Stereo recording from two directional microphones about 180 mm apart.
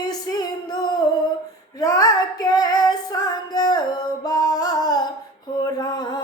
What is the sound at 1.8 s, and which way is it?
Female singing, 20° left (ahead or behind).